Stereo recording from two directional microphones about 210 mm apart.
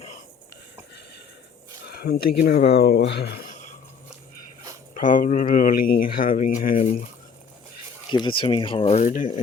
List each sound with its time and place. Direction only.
1.9 s speech: 45° left (ahead or behind)
4.9 s speech: 40° left (ahead or behind)
8.1 s speech: 25° left (ahead or behind)